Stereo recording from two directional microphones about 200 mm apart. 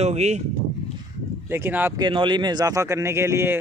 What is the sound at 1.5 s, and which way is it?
Speech, 10° right (ahead or behind).